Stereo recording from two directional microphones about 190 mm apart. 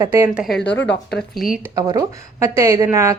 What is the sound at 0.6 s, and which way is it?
Speech, 65° left (ahead or behind).